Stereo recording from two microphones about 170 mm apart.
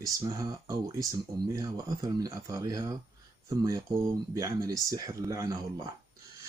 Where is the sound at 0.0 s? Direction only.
20° right (ahead or behind).